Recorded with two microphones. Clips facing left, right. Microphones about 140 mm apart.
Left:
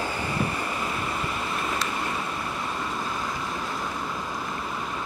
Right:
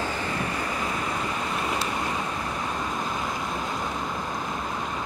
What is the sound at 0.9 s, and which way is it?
Waves, 5° left (ahead or behind).